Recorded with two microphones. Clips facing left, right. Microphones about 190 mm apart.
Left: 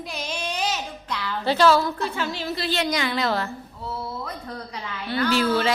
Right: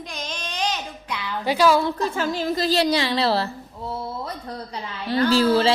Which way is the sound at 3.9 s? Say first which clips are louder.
Right 2 dB; 35° right (ahead or behind).